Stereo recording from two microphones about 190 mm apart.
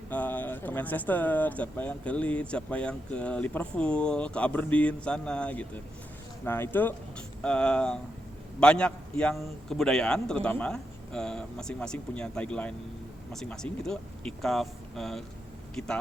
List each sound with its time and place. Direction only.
0.1 s a man's voice: 10° left (ahead or behind)